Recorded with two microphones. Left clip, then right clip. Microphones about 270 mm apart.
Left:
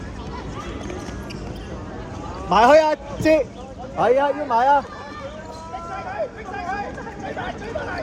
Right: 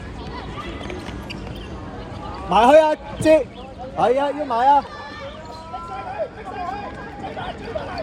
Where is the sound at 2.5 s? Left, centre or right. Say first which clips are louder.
Right 1 dB; right.